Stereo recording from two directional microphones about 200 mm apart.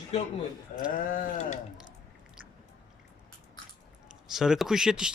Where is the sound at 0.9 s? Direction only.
45° left (ahead or behind).